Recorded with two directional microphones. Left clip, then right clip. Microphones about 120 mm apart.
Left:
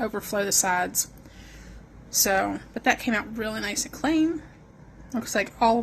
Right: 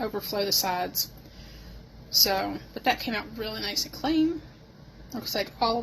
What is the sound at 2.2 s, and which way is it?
A woman's voice, 60° left (ahead or behind).